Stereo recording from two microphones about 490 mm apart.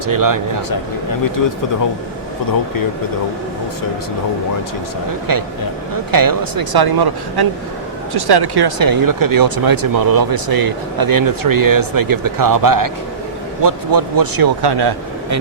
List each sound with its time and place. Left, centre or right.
0.0 s speech: right
5.3 s speech: right